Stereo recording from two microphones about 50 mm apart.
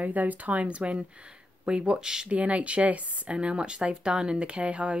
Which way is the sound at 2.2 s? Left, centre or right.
Right.